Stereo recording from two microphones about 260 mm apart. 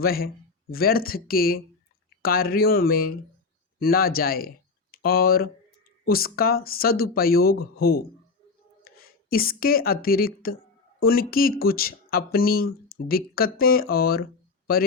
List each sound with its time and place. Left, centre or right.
0.0 s a woman's voice: left